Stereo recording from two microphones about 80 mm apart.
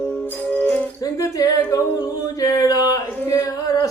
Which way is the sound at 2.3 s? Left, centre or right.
Left.